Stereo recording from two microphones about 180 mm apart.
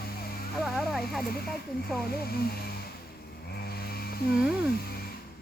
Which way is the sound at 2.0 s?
60° left (ahead or behind).